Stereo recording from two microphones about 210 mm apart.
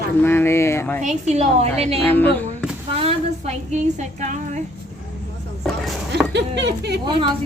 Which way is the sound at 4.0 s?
35° right (ahead or behind).